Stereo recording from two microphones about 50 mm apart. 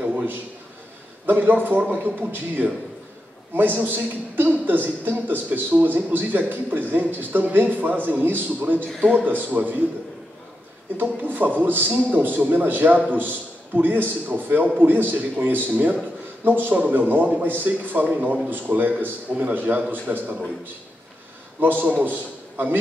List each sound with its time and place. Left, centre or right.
0.0 s a sound: right
1.2 s a man's voice: right
11.0 s a man's voice: right
16.4 s a man's voice: right
21.5 s a man's voice: right